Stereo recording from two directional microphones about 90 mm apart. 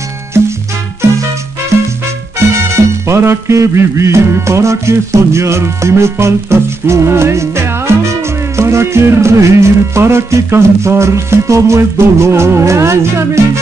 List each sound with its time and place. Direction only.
0.3 s music: 30° right (ahead or behind)
2.3 s music: 30° right (ahead or behind)